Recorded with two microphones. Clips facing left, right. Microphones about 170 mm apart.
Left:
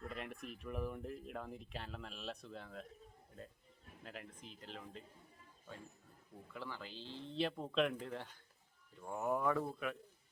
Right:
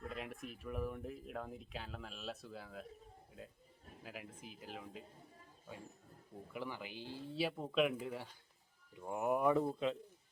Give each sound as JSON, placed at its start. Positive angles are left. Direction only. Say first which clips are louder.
{"t": 0.1, "sound": "speech", "louder": "right 1 dB", "side_deg": 0}
{"t": 4.0, "sound": "speech", "louder": "right 1 dB", "side_deg": -5}
{"t": 6.5, "sound": "speech", "louder": "right 3 dB", "side_deg": -15}